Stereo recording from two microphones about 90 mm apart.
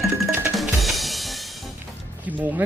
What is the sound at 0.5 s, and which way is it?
Music, centre (ahead or behind).